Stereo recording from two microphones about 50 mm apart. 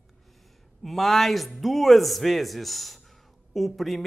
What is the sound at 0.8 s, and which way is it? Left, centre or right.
Speech, centre.